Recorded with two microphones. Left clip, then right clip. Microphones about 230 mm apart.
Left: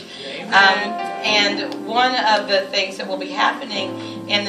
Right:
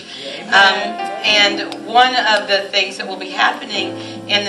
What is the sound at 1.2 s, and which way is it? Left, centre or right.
A woman's voice, centre.